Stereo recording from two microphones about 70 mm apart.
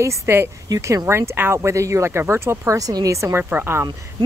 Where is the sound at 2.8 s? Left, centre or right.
Right.